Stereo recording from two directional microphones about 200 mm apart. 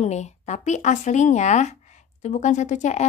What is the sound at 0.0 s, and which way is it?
A woman's voice, 35° left (ahead or behind).